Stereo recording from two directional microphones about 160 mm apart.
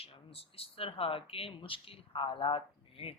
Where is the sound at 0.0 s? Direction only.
35° left (ahead or behind).